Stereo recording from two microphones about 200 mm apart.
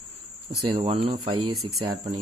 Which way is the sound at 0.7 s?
30° right (ahead or behind).